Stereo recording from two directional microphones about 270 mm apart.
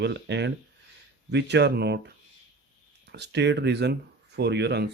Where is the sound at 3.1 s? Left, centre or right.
Right.